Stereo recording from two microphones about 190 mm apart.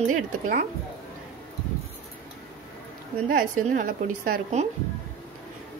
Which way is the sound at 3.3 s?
45° right (ahead or behind).